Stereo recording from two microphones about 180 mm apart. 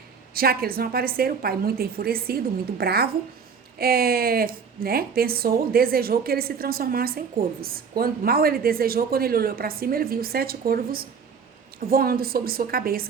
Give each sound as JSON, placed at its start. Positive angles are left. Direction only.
{"t": 0.3, "sound": "a woman's voice", "side_deg": -55}